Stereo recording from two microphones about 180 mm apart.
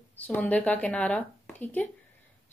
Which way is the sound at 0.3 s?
10° left (ahead or behind).